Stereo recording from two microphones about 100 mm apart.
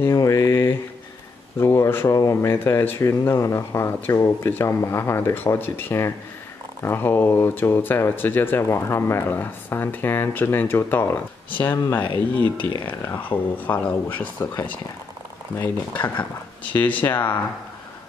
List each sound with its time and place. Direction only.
0.0 s a sound: 30° left (ahead or behind)
1.6 s speech: 25° left (ahead or behind)
12.8 s speech: 20° left (ahead or behind)
15.6 s speech: 15° left (ahead or behind)